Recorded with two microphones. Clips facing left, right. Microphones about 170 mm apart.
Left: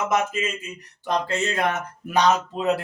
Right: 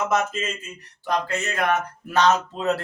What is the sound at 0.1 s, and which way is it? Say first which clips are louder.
Speech: even; 10° left (ahead or behind).